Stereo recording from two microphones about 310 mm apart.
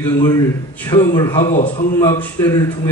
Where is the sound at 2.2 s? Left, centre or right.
Centre.